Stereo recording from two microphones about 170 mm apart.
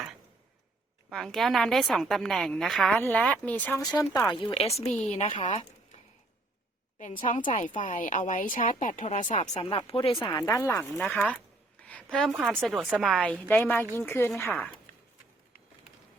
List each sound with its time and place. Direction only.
1.1 s a woman's voice: centre (ahead or behind)
3.8 s a woman's voice: 20° left (ahead or behind); by 6.0 s 45° left (ahead or behind)
7.8 s speech: 50° left (ahead or behind); by 10.3 s 30° left (ahead or behind)
10.3 s speech: 20° left (ahead or behind)
10.9 s a sound: 5° left (ahead or behind)
12.3 s a woman's voice: 5° right (ahead or behind)